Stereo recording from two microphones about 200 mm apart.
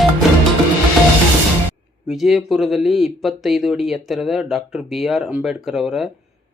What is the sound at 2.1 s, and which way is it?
Speech, centre (ahead or behind).